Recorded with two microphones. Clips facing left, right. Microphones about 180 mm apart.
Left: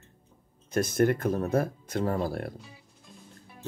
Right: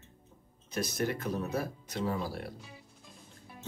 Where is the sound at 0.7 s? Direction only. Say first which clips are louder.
Left 8 dB; 50° left (ahead or behind).